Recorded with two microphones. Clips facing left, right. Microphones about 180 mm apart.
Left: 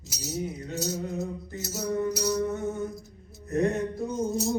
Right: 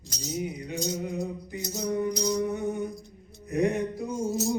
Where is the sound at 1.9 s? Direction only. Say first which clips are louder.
Even; 15° right (ahead or behind).